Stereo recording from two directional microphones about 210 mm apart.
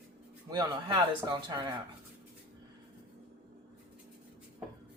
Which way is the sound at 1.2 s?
20° right (ahead or behind).